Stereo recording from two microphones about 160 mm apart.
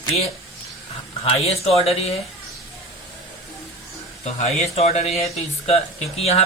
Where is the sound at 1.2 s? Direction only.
40° left (ahead or behind).